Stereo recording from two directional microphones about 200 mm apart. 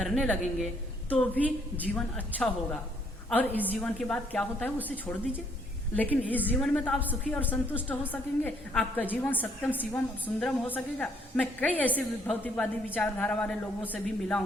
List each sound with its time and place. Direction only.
0.0 s a woman's voice: 5° left (ahead or behind)
6.0 s a woman's voice: 10° left (ahead or behind)